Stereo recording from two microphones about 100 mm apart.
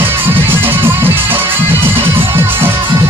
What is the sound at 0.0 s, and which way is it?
Music, 20° right (ahead or behind).